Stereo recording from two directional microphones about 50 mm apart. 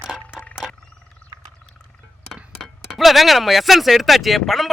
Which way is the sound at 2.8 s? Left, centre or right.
Centre.